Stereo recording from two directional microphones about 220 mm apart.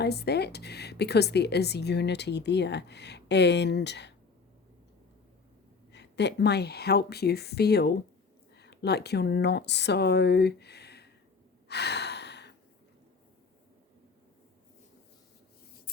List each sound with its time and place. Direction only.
0.0 s a woman's voice: 50° left (ahead or behind)
5.9 s a woman's voice: 50° left (ahead or behind)
11.7 s gasp: 50° left (ahead or behind)